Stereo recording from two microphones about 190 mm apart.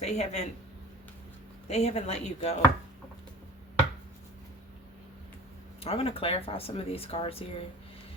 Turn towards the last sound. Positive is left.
turn(degrees=30)  # may be behind; listen again after turning